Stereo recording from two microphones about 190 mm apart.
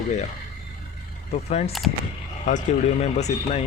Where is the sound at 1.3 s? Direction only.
35° left (ahead or behind).